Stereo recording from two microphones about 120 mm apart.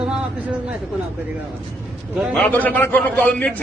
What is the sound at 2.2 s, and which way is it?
A man's voice, 5° left (ahead or behind).